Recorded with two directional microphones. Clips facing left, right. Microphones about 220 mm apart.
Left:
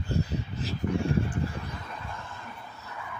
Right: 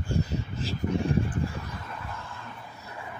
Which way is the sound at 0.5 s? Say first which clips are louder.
Right 1 dB; 50° right (ahead or behind).